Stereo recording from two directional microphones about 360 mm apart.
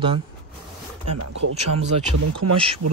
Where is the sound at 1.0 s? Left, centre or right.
Right.